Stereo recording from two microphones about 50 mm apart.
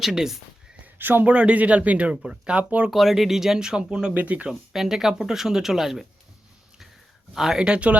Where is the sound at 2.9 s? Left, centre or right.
Centre; by 4.5 s right.